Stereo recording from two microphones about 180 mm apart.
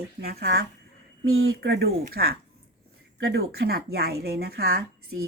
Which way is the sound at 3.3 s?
60° right (ahead or behind).